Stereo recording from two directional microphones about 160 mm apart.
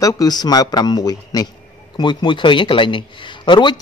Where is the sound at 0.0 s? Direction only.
25° left (ahead or behind).